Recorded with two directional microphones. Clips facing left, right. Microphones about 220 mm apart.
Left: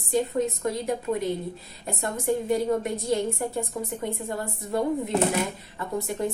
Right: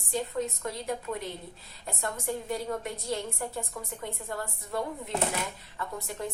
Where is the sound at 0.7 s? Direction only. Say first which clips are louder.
Left 7 dB; 15° left (ahead or behind).